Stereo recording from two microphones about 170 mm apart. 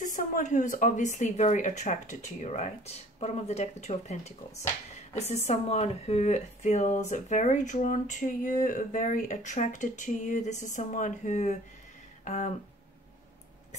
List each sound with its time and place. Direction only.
0.0 s speech: 50° left (ahead or behind)